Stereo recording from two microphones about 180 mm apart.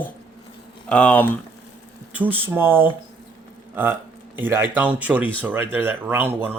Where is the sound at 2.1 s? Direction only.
10° right (ahead or behind).